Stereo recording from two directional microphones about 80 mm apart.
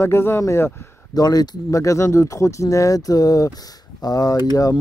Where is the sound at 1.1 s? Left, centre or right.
Left.